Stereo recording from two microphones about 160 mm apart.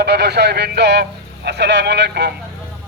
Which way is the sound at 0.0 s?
90° right.